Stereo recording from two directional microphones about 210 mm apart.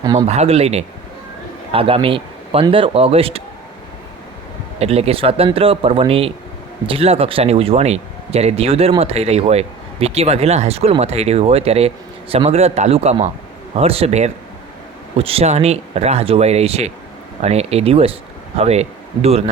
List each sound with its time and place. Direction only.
0.0 s speech: 20° right (ahead or behind)
0.3 s speech: 30° right (ahead or behind)
4.8 s speech: 30° right (ahead or behind)